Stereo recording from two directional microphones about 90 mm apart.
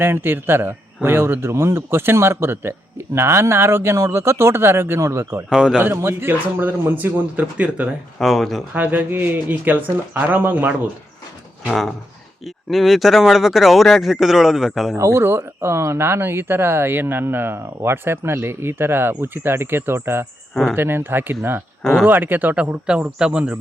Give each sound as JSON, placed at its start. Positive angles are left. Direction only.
{"t": 0.0, "sound": "speech", "side_deg": -25}
{"t": 5.5, "sound": "speech", "side_deg": -10}
{"t": 5.8, "sound": "speech", "side_deg": -25}
{"t": 8.2, "sound": "speech", "side_deg": 0}
{"t": 8.7, "sound": "speech", "side_deg": -20}
{"t": 11.7, "sound": "speech", "side_deg": 5}
{"t": 14.9, "sound": "speech", "side_deg": -30}
{"t": 20.5, "sound": "speech", "side_deg": 0}
{"t": 20.7, "sound": "speech", "side_deg": -25}